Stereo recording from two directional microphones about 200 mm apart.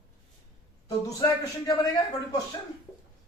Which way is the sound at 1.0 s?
20° left (ahead or behind).